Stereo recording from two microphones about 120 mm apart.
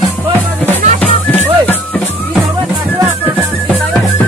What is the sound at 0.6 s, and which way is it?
Music, 15° left (ahead or behind).